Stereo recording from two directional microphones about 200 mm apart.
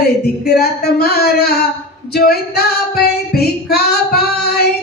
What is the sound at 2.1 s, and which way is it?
Female singing, 50° left (ahead or behind).